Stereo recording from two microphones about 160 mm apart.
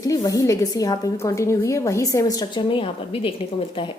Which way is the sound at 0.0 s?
20° left (ahead or behind).